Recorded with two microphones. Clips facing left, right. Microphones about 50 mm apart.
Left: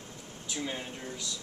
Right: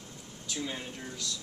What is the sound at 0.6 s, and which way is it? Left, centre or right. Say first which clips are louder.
Speech: left 1 dB; centre.